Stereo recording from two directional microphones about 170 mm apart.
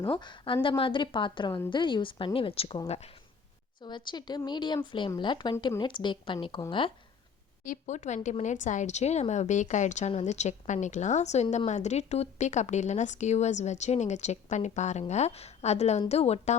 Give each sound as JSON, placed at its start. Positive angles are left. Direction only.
{"t": 0.1, "sound": "speech", "side_deg": 30}
{"t": 3.8, "sound": "speech", "side_deg": 25}
{"t": 7.6, "sound": "a woman's voice", "side_deg": 50}